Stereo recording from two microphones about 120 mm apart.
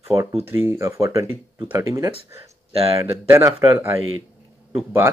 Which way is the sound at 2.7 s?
55° right (ahead or behind).